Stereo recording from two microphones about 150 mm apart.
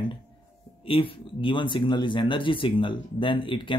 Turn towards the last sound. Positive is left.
turn(degrees=35)  # may be behind; listen again after turning